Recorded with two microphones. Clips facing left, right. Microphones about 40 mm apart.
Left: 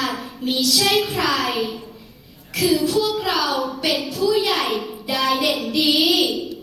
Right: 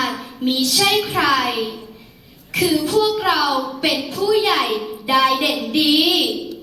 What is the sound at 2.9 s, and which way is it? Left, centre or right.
Child singing, centre.